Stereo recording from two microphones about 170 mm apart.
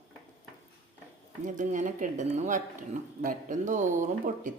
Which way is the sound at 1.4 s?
50° right (ahead or behind).